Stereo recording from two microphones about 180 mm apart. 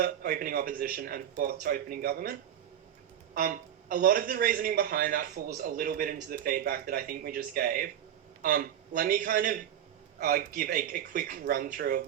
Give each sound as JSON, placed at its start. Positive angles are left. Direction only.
{"t": 0.0, "sound": "speech", "side_deg": -55}
{"t": 3.3, "sound": "speech", "side_deg": -50}